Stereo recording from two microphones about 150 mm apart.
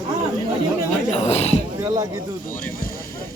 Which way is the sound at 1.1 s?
45° left (ahead or behind).